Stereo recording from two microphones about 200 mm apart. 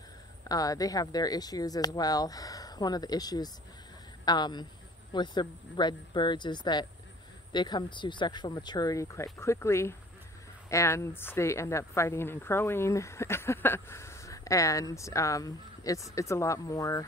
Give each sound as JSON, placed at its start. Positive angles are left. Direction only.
{"t": 0.5, "sound": "a woman's voice", "side_deg": 20}